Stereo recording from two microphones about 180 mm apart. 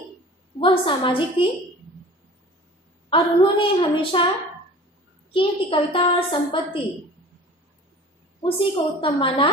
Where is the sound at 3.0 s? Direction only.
30° left (ahead or behind).